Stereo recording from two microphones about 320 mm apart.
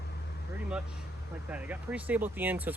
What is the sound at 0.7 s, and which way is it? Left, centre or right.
Speech, centre.